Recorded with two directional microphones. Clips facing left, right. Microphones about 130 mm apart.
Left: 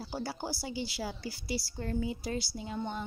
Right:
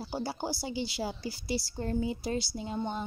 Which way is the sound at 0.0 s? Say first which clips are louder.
Right 3 dB; 20° right (ahead or behind).